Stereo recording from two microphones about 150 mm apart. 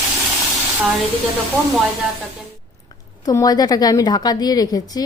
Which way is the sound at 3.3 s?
25° left (ahead or behind).